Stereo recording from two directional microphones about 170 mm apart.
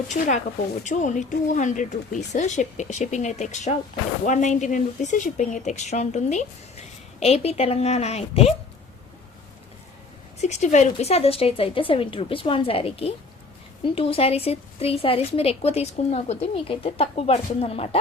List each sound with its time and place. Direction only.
0.1 s speech: 45° left (ahead or behind)
10.4 s speech: 45° left (ahead or behind)